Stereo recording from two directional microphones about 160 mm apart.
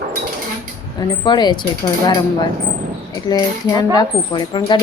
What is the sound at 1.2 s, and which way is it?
Coin, 25° left (ahead or behind).